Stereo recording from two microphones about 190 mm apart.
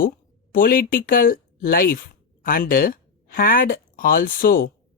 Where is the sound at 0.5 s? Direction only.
45° left (ahead or behind).